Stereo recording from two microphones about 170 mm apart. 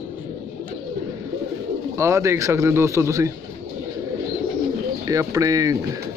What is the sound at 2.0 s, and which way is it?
Speech, 15° right (ahead or behind).